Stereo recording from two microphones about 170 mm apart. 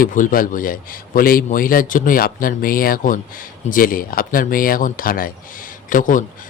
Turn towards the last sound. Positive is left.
turn(degrees=50)  # may be behind; listen again after turning